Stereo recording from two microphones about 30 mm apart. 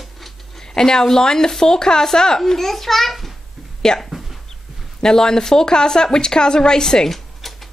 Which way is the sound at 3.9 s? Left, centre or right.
Left.